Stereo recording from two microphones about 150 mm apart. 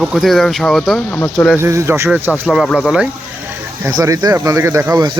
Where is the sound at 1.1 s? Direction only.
15° left (ahead or behind).